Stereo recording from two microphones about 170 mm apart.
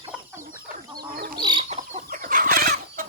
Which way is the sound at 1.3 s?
25° right (ahead or behind).